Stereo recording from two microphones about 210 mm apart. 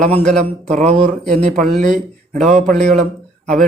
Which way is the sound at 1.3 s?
40° right (ahead or behind).